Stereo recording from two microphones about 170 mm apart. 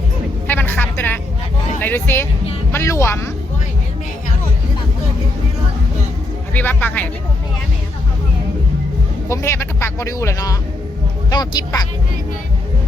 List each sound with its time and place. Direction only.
0.4 s a sound: 10° left (ahead or behind)
1.8 s speech: 10° left (ahead or behind)
6.5 s speech: 10° left (ahead or behind)
9.3 s speech: 15° left (ahead or behind)